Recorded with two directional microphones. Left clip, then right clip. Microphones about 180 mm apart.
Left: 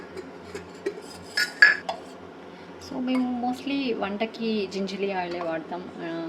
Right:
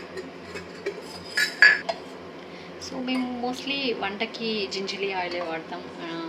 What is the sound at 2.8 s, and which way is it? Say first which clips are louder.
A woman's voice: left 2 dB; 55° left (ahead or behind).